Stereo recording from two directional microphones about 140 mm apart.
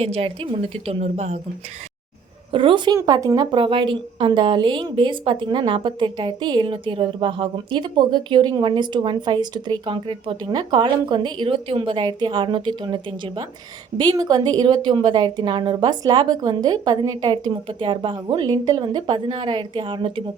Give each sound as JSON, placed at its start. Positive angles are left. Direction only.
{"t": 0.0, "sound": "a woman's voice", "side_deg": -45}
{"t": 2.5, "sound": "a woman's voice", "side_deg": -40}